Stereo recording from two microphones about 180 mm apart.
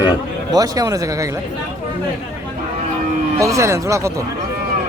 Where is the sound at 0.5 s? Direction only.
20° right (ahead or behind).